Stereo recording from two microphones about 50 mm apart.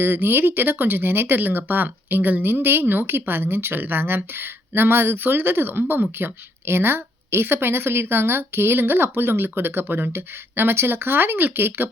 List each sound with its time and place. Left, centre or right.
0.0 s a woman's voice: right
1.4 s a woman's voice: right